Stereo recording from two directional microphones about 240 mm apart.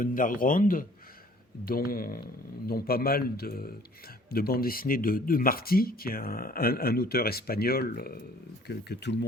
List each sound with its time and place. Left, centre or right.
0.0 s speech: left